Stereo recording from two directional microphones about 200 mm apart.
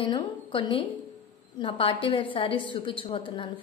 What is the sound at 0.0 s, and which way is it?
A woman's voice, 25° left (ahead or behind).